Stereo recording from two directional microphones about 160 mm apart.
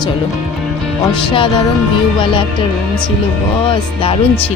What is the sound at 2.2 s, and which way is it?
Speech, 30° left (ahead or behind).